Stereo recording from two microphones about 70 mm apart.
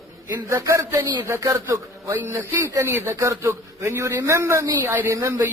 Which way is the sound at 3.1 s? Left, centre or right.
Right.